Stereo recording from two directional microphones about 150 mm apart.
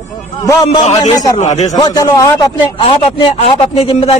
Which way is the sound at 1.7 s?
25° left (ahead or behind).